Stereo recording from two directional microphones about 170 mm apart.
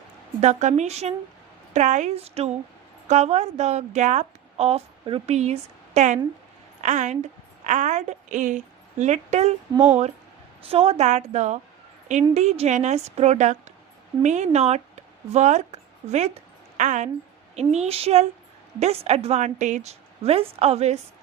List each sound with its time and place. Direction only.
0.4 s a woman's voice: 40° right (ahead or behind)
10.7 s a woman's voice: 35° right (ahead or behind)